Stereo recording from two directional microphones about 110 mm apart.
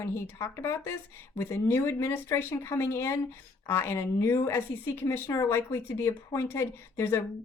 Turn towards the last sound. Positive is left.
turn(degrees=25)  # may be behind; listen again after turning